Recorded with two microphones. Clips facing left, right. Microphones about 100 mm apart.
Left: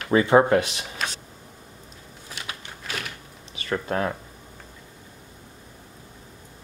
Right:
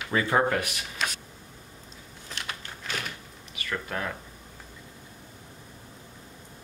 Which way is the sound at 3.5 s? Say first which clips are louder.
Left 7 dB; 30° left (ahead or behind).